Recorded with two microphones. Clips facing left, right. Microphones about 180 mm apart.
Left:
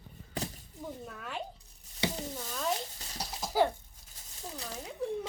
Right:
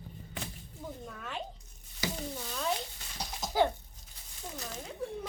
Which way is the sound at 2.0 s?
30° left (ahead or behind).